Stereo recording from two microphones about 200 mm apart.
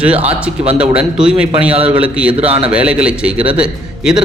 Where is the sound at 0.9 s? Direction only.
5° right (ahead or behind).